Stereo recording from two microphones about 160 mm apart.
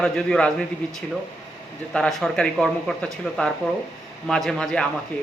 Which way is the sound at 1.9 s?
5° left (ahead or behind).